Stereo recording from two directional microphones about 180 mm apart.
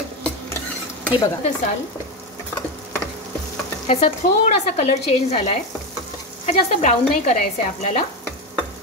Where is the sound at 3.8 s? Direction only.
35° left (ahead or behind).